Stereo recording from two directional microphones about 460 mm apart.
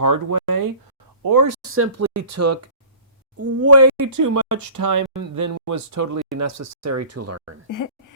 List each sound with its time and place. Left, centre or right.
0.0 s speech: right
1.7 s speech: right
7.7 s speech: left